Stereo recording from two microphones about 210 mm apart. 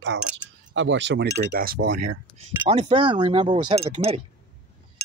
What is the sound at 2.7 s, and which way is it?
Speech, 25° right (ahead or behind).